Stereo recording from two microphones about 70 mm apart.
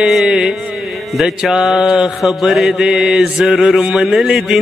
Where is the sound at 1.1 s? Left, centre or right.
Centre.